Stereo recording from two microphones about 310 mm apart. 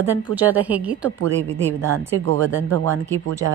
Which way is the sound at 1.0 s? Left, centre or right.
Right.